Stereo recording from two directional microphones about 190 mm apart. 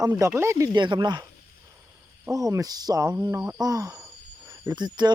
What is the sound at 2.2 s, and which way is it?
Speech, 15° right (ahead or behind).